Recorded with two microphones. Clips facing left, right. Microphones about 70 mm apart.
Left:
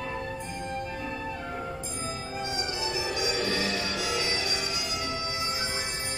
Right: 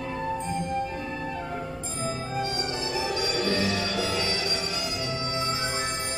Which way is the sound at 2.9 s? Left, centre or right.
Centre.